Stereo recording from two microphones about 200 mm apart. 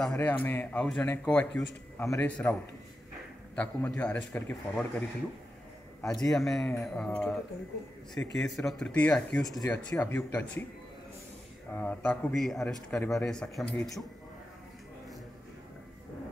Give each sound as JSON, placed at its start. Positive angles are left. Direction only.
{"t": 0.0, "sound": "a man's voice", "side_deg": 5}
{"t": 3.5, "sound": "a man's voice", "side_deg": 5}
{"t": 6.0, "sound": "a man's voice", "side_deg": 0}
{"t": 11.7, "sound": "a man's voice", "side_deg": 5}